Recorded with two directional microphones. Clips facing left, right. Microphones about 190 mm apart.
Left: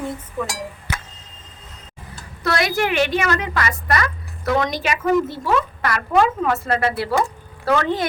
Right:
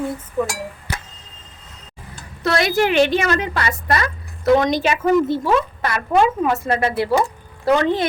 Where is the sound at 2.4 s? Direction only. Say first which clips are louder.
Right 3 dB; 25° right (ahead or behind).